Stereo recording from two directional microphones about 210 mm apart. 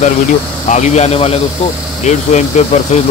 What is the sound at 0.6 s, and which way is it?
Speech, 35° left (ahead or behind).